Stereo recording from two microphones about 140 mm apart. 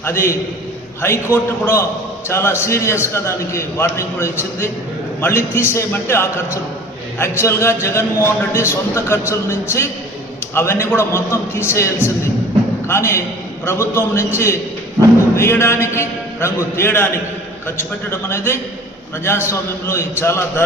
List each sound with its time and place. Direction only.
0.0 s a man's voice: 20° left (ahead or behind)